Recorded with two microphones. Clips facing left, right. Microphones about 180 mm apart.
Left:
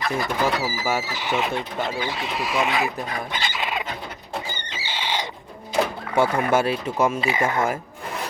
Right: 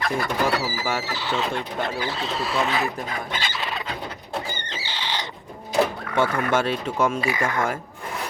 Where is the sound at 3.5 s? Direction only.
15° left (ahead or behind).